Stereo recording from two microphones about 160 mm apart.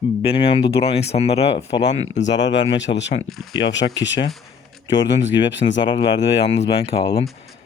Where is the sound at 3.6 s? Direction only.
30° left (ahead or behind).